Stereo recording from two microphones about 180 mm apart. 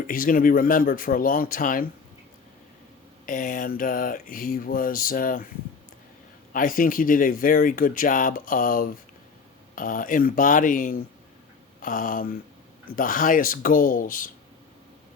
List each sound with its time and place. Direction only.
0.1 s speech: 50° left (ahead or behind)
3.2 s speech: 50° left (ahead or behind)
6.5 s speech: 50° left (ahead or behind)